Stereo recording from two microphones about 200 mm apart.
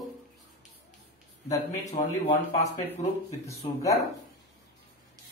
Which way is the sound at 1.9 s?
35° left (ahead or behind).